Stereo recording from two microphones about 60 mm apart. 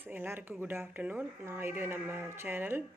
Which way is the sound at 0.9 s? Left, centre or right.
Right.